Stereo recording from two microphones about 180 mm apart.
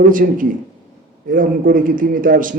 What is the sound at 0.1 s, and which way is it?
A man's voice, 50° right (ahead or behind).